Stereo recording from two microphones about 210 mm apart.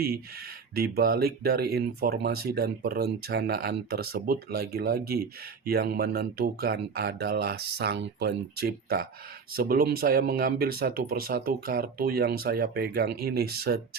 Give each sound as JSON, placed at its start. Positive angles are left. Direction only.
{"t": 0.8, "sound": "speech", "side_deg": -45}